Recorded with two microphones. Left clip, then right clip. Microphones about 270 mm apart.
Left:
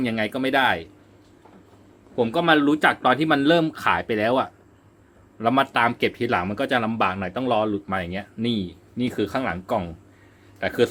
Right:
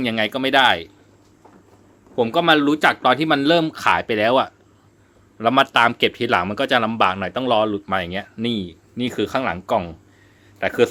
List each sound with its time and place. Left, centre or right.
0.0 s speech: right
2.1 s a man's voice: centre